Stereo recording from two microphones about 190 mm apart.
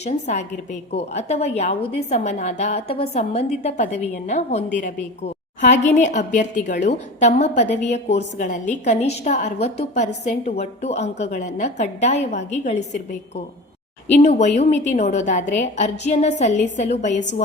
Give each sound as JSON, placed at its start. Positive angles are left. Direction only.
{"t": 0.0, "sound": "a woman's voice", "side_deg": 35}